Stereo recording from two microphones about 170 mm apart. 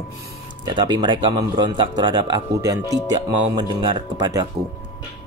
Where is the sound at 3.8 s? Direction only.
25° right (ahead or behind).